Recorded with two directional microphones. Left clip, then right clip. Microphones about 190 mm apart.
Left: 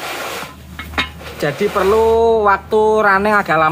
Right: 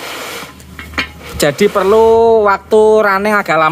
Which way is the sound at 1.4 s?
50° right (ahead or behind).